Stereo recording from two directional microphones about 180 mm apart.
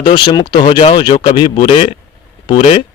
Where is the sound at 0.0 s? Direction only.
25° left (ahead or behind).